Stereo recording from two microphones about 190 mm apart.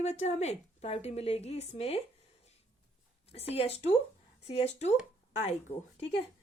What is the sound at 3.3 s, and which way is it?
A woman's voice, 30° left (ahead or behind).